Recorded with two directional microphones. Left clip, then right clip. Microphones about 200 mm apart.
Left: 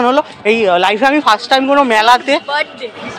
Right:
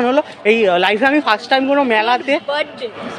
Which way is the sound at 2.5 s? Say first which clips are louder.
Left 3 dB; 20° right (ahead or behind).